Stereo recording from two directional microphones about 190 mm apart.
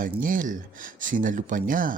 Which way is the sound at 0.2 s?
45° right (ahead or behind).